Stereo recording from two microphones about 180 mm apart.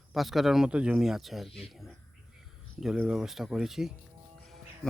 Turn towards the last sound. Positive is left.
turn(degrees=0)  # may be behind; listen again after turning